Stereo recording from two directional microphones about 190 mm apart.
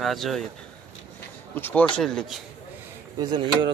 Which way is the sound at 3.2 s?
25° right (ahead or behind).